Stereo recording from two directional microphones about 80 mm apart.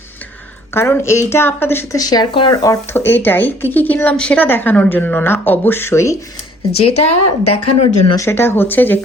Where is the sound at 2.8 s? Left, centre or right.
Left.